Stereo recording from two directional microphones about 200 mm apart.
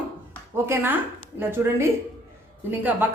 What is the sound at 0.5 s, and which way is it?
Speech, 10° right (ahead or behind).